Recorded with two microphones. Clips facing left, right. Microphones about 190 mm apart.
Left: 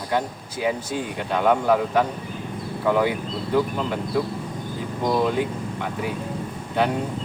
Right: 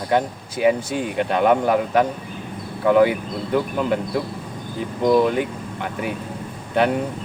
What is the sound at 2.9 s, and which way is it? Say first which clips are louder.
Speech: right 6 dB; 60° right (ahead or behind).